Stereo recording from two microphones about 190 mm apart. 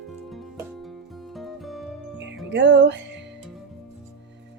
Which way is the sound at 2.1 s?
70° right (ahead or behind).